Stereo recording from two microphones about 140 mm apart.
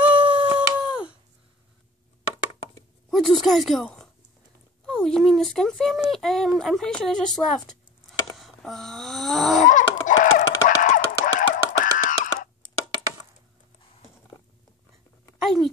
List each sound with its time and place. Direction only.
0.0 s humming: 10° right (ahead or behind)
3.1 s a woman's voice: centre (ahead or behind)
8.4 s snoring: centre (ahead or behind)
9.7 s a sound: 70° left (ahead or behind)